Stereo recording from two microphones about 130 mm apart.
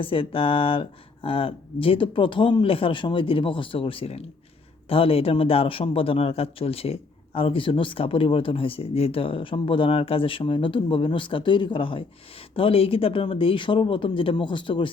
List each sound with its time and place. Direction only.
0.0 s a man's voice: 45° left (ahead or behind)